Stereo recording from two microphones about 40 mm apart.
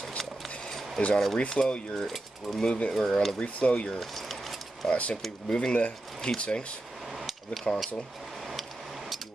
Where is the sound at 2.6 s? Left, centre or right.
Left.